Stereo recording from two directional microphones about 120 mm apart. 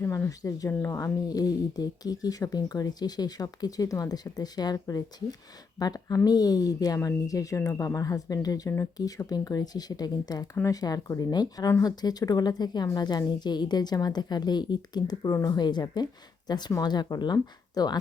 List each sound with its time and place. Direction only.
0.0 s speech: 20° left (ahead or behind)